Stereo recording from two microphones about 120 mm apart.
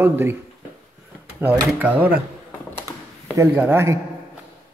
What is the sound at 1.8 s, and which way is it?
Speech, 15° right (ahead or behind).